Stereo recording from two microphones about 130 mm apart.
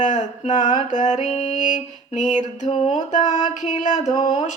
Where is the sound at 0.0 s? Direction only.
65° left (ahead or behind).